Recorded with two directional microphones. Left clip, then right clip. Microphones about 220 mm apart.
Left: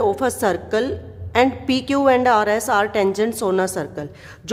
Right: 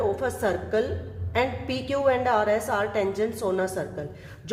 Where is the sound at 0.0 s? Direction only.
40° left (ahead or behind).